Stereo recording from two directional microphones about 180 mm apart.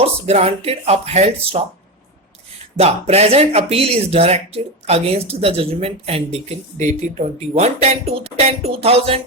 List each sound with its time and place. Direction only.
0.0 s speech: 35° right (ahead or behind)
2.7 s speech: 35° right (ahead or behind)